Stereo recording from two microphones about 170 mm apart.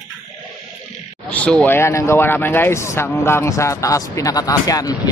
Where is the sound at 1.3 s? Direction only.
10° left (ahead or behind).